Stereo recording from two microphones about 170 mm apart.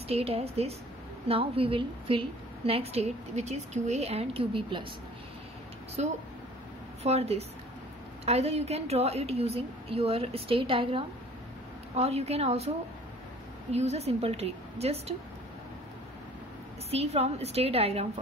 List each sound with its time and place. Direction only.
0.1 s a woman's voice: 35° right (ahead or behind)
6.0 s a woman's voice: 40° right (ahead or behind)
16.9 s a woman's voice: 40° right (ahead or behind)